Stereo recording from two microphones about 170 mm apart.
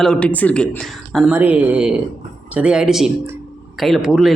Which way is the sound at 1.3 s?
10° right (ahead or behind).